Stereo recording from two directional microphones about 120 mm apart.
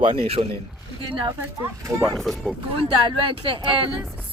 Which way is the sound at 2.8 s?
45° right (ahead or behind).